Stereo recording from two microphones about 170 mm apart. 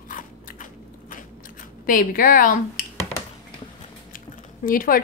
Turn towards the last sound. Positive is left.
turn(degrees=55)  # may be behind; listen again after turning